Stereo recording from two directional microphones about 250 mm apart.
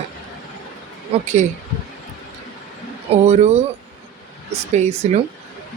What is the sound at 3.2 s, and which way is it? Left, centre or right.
Speech, right.